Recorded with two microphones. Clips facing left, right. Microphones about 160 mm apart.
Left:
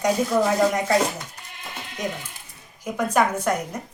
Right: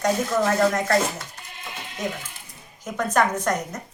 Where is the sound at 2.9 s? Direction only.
10° left (ahead or behind).